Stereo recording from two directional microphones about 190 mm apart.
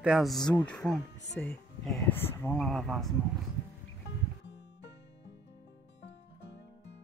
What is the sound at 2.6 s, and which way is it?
Speech, centre (ahead or behind).